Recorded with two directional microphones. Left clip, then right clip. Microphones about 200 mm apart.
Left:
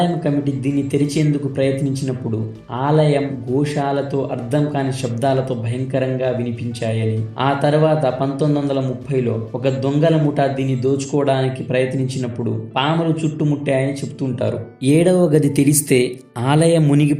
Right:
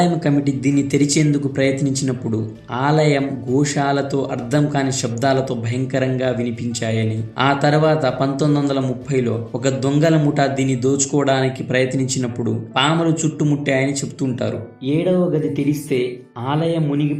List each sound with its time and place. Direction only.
0.2 s a man's voice: 5° right (ahead or behind)
14.8 s speech: 65° left (ahead or behind)